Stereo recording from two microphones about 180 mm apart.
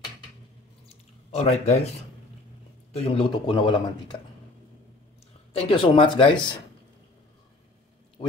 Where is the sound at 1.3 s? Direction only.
35° left (ahead or behind).